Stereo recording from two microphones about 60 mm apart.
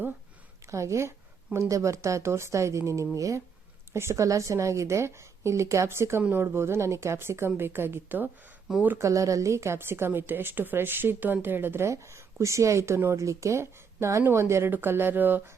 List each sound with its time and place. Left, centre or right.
0.7 s a woman's voice: right
3.9 s speech: right
4.2 s a woman's voice: right
9.0 s a woman's voice: right
11.9 s a woman's voice: right
14.7 s a woman's voice: right